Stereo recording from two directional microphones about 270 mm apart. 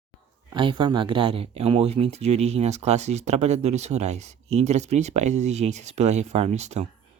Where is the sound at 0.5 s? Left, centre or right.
Centre.